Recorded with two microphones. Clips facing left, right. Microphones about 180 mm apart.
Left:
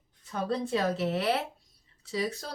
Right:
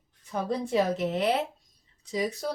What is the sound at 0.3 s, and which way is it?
Speech, 15° right (ahead or behind).